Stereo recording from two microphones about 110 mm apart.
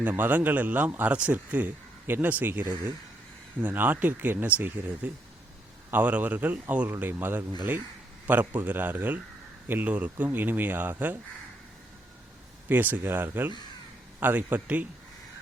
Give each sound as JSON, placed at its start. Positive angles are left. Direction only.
{"t": 0.0, "sound": "speech", "side_deg": -15}
{"t": 12.6, "sound": "speech", "side_deg": -15}